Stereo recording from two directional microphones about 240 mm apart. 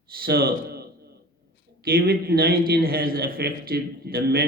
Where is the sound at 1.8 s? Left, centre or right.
Right.